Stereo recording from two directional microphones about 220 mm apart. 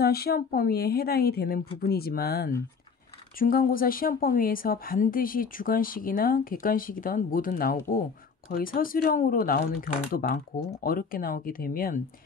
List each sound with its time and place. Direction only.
0.0 s a woman's voice: 45° left (ahead or behind)